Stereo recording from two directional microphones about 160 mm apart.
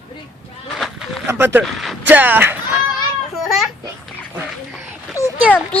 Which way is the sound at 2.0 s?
10° right (ahead or behind).